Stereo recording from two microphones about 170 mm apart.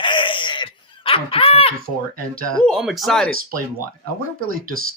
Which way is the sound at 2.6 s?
Centre (ahead or behind).